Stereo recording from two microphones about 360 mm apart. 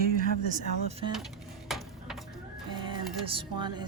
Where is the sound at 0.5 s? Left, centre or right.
Centre.